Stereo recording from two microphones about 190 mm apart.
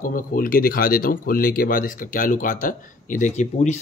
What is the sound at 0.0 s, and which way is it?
Speech, 45° left (ahead or behind).